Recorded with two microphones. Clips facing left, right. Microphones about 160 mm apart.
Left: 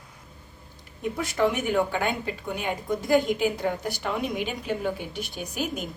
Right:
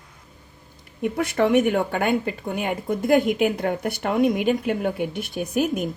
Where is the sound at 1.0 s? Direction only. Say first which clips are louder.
Right 4 dB; 65° right (ahead or behind).